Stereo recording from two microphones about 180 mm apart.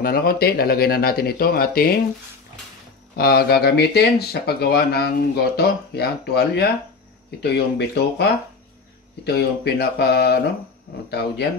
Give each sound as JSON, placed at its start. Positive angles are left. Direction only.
{"t": 0.0, "sound": "speech", "side_deg": 55}
{"t": 3.2, "sound": "speech", "side_deg": 60}